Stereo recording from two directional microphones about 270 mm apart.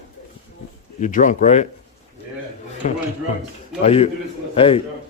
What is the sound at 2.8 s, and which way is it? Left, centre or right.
A man's voice, left.